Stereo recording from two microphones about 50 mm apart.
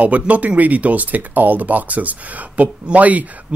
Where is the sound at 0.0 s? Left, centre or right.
Right.